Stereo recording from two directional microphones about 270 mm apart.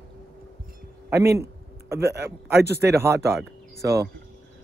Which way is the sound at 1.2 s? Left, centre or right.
Centre.